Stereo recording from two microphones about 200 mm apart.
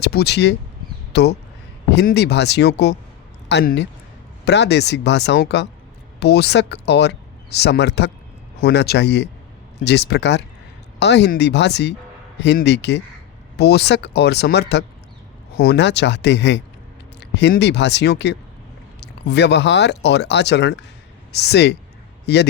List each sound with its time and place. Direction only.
0.0 s speech: 55° left (ahead or behind)